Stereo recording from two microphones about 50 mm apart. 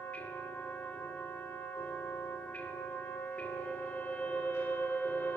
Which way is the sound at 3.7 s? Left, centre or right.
Left.